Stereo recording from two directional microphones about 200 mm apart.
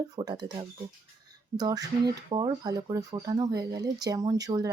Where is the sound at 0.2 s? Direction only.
20° right (ahead or behind).